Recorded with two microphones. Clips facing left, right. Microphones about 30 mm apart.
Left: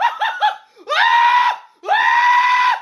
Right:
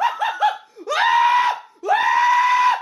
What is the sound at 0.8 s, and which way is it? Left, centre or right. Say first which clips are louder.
Screaming: left 3 dB; left.